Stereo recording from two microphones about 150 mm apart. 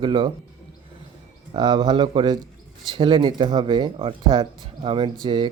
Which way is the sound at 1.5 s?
30° right (ahead or behind).